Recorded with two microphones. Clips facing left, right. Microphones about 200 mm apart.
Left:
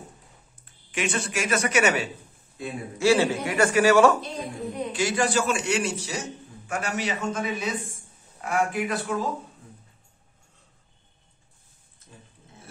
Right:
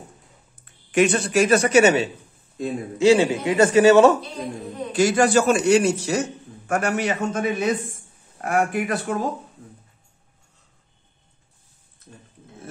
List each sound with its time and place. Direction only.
0.9 s a man's voice: 40° right (ahead or behind); by 4.2 s 20° right (ahead or behind)
4.9 s a man's voice: 45° right (ahead or behind)